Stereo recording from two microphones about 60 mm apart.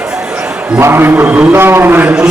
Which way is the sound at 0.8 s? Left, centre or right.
Right.